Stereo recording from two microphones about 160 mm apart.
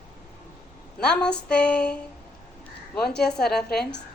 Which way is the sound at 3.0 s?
5° left (ahead or behind).